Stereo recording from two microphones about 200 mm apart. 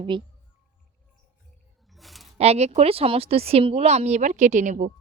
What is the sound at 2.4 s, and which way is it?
Speech, 30° right (ahead or behind).